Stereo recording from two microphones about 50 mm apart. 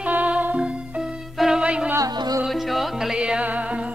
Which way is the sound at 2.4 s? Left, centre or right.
Centre.